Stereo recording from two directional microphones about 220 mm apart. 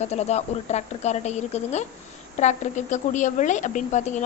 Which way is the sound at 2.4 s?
35° left (ahead or behind).